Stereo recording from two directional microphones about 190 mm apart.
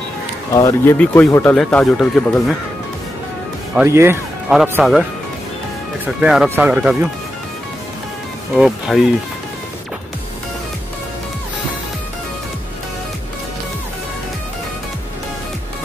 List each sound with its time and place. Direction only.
0.5 s speech: 15° left (ahead or behind)
3.7 s speech: 15° right (ahead or behind)
4.5 s speech: centre (ahead or behind)
6.2 s speech: 5° right (ahead or behind)
8.5 s speech: centre (ahead or behind)